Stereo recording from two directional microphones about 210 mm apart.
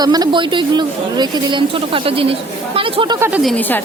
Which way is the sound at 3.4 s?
5° left (ahead or behind).